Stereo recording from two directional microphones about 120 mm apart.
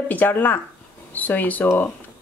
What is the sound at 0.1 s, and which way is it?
Speech, 15° left (ahead or behind).